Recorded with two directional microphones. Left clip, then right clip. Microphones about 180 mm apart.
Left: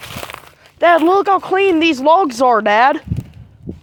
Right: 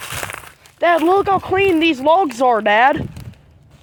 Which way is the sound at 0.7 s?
40° left (ahead or behind).